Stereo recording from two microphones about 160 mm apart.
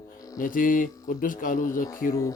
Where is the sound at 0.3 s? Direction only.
60° left (ahead or behind).